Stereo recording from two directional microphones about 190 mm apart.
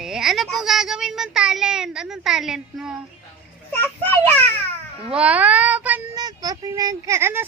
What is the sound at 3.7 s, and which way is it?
Speech, 10° left (ahead or behind).